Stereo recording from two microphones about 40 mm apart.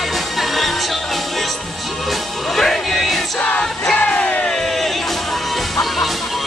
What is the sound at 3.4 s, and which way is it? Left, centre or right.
Music, left.